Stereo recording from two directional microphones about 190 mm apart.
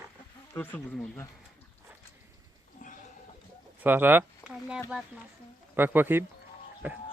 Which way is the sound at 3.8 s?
10° right (ahead or behind).